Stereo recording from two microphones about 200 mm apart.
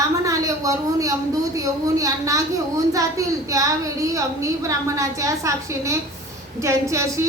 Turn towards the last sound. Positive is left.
turn(degrees=-15)  # may be behind; listen again after turning